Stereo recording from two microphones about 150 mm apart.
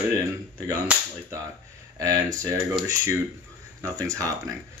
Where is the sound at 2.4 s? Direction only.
20° right (ahead or behind).